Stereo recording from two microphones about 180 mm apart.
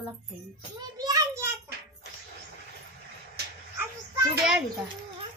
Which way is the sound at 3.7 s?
10° right (ahead or behind).